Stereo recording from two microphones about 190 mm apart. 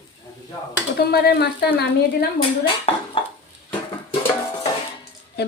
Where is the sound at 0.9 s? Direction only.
55° left (ahead or behind).